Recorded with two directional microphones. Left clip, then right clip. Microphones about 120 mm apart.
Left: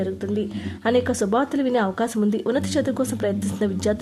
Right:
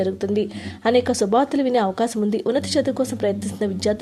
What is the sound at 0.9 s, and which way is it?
A woman's voice, 10° right (ahead or behind).